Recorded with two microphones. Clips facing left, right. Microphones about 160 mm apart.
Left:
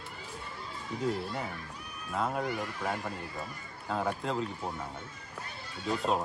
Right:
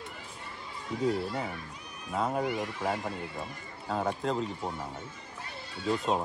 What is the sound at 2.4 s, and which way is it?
Speech, 20° right (ahead or behind).